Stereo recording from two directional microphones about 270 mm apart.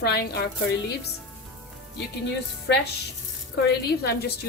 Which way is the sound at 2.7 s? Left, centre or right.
Left.